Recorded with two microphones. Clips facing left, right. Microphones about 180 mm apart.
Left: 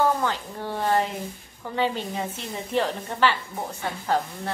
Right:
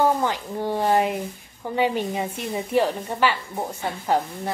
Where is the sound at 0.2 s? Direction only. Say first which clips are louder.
Right 3 dB; 15° right (ahead or behind).